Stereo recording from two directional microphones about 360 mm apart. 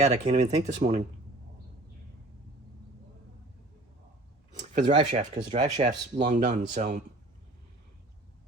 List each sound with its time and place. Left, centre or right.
0.0 s speech: centre
4.5 s speech: centre